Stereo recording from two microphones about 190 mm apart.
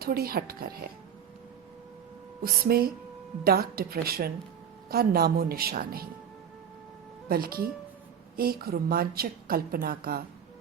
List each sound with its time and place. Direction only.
0.0 s a woman's voice: 50° right (ahead or behind)
2.4 s a woman's voice: 50° right (ahead or behind)
7.3 s a woman's voice: 50° right (ahead or behind)